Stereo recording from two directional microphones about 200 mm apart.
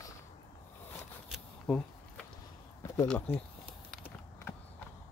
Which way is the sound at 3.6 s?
5° right (ahead or behind).